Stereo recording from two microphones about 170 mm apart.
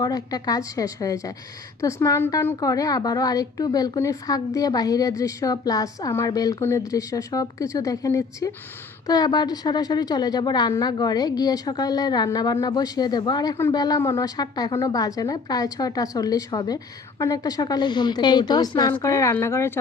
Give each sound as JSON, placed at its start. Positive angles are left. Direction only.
{"t": 0.0, "sound": "a woman's voice", "side_deg": 20}